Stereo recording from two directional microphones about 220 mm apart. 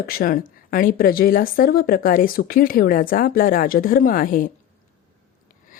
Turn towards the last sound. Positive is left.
turn(degrees=40)  # may be behind; listen again after turning